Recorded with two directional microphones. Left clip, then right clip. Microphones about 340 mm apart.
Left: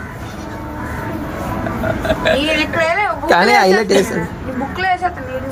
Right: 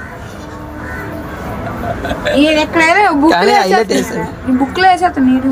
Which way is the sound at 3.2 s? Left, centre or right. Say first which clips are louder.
Right 1 dB; centre.